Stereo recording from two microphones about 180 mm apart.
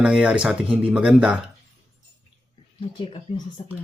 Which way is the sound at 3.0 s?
30° left (ahead or behind).